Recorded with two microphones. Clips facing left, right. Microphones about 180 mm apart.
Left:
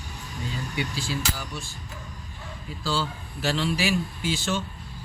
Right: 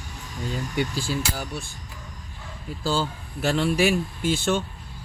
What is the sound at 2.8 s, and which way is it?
Speech, 50° right (ahead or behind).